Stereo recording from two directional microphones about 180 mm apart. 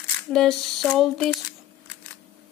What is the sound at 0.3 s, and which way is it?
Speech, centre (ahead or behind).